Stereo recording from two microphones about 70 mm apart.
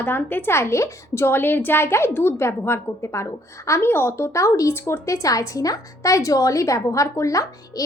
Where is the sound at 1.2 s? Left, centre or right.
Left.